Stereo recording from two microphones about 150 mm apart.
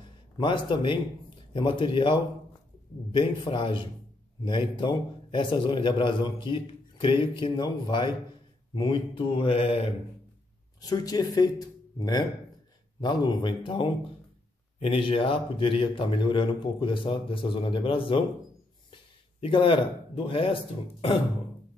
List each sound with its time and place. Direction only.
0.4 s a man's voice: 35° left (ahead or behind)
10.8 s a man's voice: 25° left (ahead or behind)
19.4 s a man's voice: 35° left (ahead or behind)